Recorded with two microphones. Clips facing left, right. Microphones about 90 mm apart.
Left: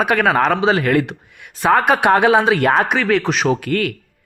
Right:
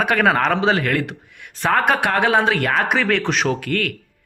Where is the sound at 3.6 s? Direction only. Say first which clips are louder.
Left 3 dB; 15° left (ahead or behind).